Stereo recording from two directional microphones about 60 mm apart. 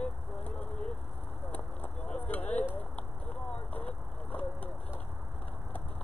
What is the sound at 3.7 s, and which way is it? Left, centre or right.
Speech, left.